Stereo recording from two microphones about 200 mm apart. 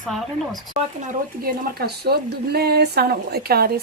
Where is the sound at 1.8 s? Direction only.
50° right (ahead or behind).